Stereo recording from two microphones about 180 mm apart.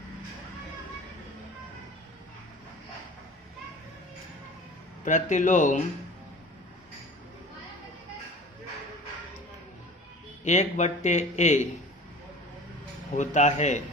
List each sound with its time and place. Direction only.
5.0 s speech: 45° left (ahead or behind)
10.4 s speech: 40° left (ahead or behind)
13.1 s speech: 40° left (ahead or behind)